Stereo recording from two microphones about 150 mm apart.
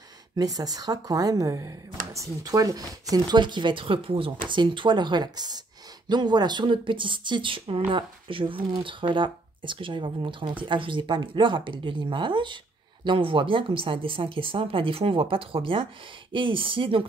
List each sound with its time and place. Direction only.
0.4 s speech: 25° right (ahead or behind)